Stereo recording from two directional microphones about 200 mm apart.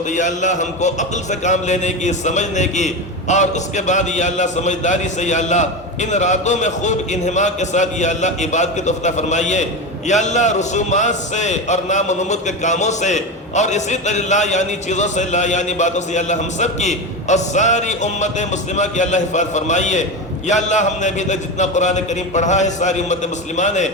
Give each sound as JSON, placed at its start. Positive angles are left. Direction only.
{"t": 0.1, "sound": "a man's voice", "side_deg": 35}